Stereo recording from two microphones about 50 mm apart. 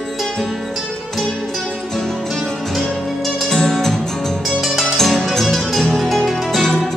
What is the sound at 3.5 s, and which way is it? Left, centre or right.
Music, centre.